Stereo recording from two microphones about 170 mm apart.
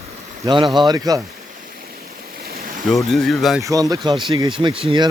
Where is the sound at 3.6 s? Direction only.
20° right (ahead or behind).